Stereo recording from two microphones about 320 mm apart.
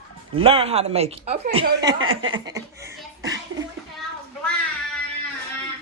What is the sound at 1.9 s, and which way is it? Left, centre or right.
Speech, right.